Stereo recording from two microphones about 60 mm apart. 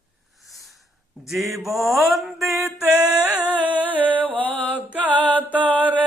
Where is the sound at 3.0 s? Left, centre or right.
Right.